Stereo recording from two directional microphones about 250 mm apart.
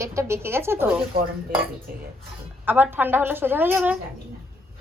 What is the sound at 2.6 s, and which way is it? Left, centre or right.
A woman's voice, centre.